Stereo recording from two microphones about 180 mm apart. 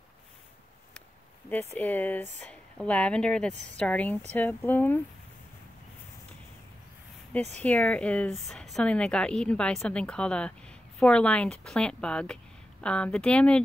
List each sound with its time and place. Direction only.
1.8 s speech: 10° left (ahead or behind)
7.6 s a woman's voice: 10° left (ahead or behind)